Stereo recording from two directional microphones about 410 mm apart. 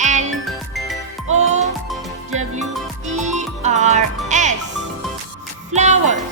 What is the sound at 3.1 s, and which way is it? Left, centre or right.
Music, centre.